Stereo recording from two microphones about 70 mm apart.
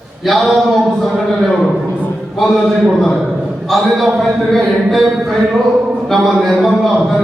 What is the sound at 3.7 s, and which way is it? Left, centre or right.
A man's voice, centre.